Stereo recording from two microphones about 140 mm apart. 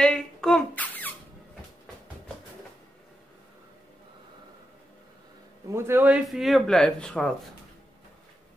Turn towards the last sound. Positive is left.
turn(degrees=5)  # may be behind; listen again after turning